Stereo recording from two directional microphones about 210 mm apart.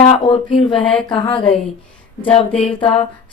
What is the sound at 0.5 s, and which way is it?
Speech, 25° left (ahead or behind).